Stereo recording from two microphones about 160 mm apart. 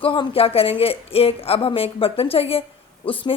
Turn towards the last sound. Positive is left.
turn(degrees=35)  # may be behind; listen again after turning